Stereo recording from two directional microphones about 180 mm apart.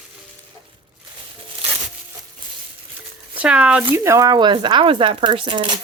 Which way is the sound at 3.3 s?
5° right (ahead or behind).